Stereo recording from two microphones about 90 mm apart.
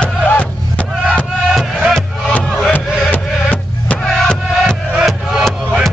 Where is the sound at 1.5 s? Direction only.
10° right (ahead or behind).